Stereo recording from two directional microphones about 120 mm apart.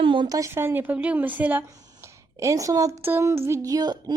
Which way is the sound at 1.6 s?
30° right (ahead or behind).